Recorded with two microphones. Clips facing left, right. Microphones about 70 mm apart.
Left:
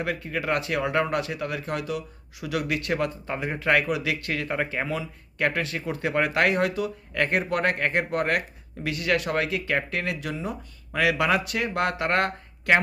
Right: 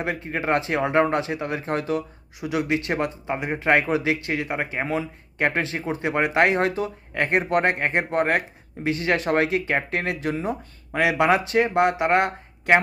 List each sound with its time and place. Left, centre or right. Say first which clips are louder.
0.0 s speech: right 2 dB; right
4.9 s speech: right 4 dB; right